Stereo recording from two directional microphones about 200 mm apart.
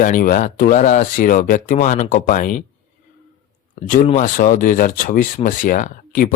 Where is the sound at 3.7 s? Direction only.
40° left (ahead or behind).